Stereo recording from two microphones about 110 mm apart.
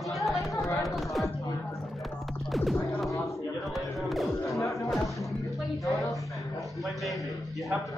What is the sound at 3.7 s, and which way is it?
Music, centre (ahead or behind).